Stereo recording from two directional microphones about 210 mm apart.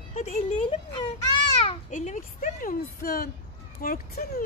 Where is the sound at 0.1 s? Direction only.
30° left (ahead or behind).